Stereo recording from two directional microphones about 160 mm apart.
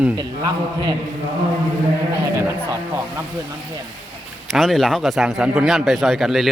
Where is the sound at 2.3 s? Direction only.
20° right (ahead or behind).